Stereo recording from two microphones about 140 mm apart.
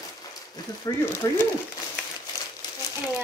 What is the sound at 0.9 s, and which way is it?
Speech, 25° left (ahead or behind).